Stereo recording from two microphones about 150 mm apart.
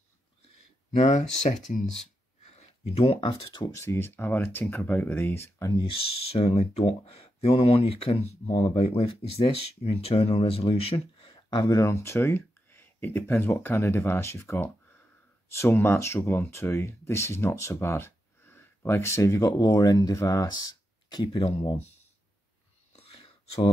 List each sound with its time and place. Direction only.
0.9 s speech: 50° left (ahead or behind); by 3.7 s 30° left (ahead or behind)
3.7 s speech: 20° left (ahead or behind)
5.8 s speech: 35° left (ahead or behind)
22.9 s whispering: 40° left (ahead or behind)